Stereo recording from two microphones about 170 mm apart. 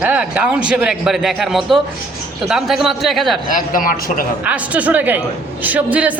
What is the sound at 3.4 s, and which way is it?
Speech, 55° left (ahead or behind).